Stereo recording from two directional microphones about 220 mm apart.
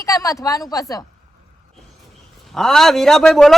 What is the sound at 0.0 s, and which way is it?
A woman's voice, 15° left (ahead or behind).